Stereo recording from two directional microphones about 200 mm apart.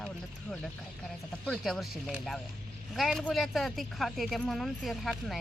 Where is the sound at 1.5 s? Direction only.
Centre (ahead or behind).